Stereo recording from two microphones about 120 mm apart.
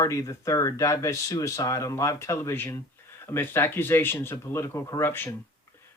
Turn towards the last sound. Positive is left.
turn(degrees=20)  # may be behind; listen again after turning